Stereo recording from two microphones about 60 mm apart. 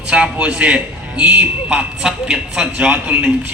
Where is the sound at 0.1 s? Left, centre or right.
Centre.